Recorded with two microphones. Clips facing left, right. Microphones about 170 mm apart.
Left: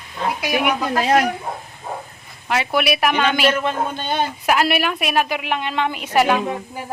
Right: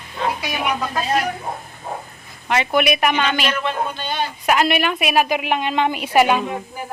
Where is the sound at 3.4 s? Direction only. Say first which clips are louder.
Left 3 dB; 45° left (ahead or behind).